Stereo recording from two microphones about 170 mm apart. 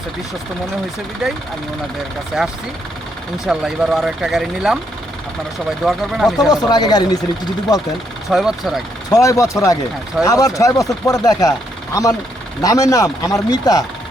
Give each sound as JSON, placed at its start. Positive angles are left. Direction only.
{"t": 2.4, "sound": "speech", "side_deg": 0}
{"t": 5.8, "sound": "speech", "side_deg": 0}
{"t": 6.5, "sound": "speech", "side_deg": 25}
{"t": 8.3, "sound": "speech", "side_deg": 0}
{"t": 9.0, "sound": "speech", "side_deg": 20}
{"t": 12.6, "sound": "speech", "side_deg": 20}